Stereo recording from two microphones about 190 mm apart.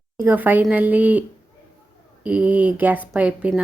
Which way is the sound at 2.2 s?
5° right (ahead or behind).